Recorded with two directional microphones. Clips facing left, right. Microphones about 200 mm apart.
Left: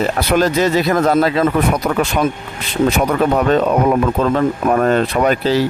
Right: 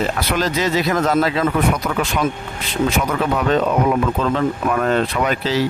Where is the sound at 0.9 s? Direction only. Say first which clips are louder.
Left 4 dB; 40° left (ahead or behind).